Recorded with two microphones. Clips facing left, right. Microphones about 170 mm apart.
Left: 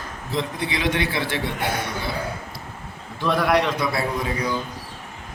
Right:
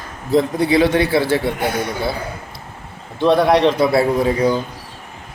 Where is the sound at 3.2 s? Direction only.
25° right (ahead or behind).